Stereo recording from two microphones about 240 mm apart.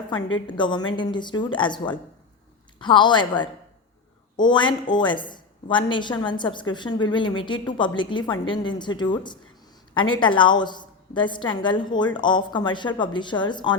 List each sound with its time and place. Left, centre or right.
0.1 s a woman's voice: centre